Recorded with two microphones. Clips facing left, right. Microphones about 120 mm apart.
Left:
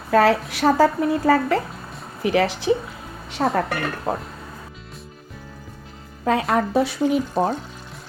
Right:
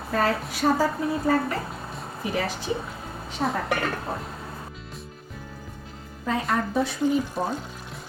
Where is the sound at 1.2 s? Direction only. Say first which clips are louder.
Left 6 dB; 90° left.